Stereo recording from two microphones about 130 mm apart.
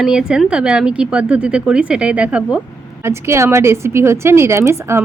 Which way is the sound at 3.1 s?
20° right (ahead or behind).